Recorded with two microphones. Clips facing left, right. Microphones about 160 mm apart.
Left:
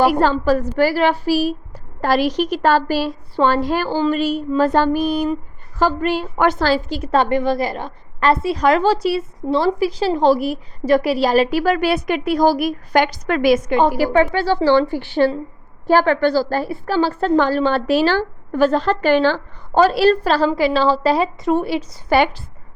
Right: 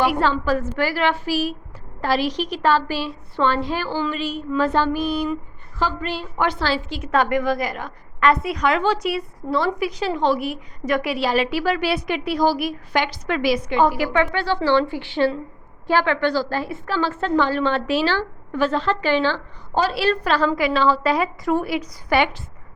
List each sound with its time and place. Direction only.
0.0 s a woman's voice: 40° left (ahead or behind)